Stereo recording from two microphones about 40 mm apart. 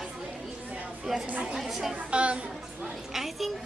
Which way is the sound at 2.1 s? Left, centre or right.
Right.